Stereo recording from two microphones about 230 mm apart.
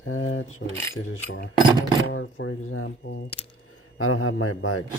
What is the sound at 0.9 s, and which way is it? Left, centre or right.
Speech, left.